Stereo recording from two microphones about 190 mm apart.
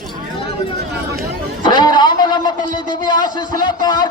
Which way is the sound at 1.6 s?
25° left (ahead or behind).